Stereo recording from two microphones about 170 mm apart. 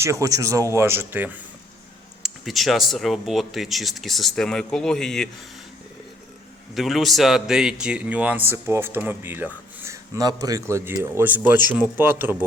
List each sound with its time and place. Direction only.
0.0 s a man's voice: 20° right (ahead or behind)
2.2 s speech: centre (ahead or behind)
6.7 s a man's voice: centre (ahead or behind)